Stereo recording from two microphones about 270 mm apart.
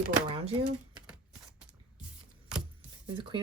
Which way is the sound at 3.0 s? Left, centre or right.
Centre.